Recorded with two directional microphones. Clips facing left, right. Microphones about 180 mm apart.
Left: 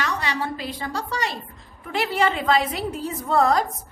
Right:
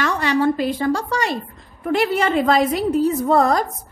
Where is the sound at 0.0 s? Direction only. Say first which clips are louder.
Right 8 dB; 50° right (ahead or behind).